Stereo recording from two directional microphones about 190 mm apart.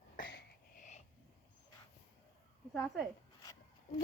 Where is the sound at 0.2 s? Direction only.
50° left (ahead or behind).